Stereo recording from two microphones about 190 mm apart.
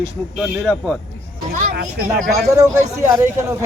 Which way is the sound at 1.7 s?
50° right (ahead or behind).